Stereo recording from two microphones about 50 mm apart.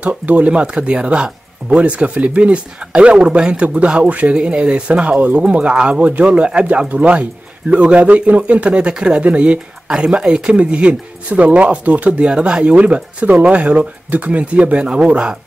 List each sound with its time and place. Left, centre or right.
0.0 s speech: right
9.8 s speech: centre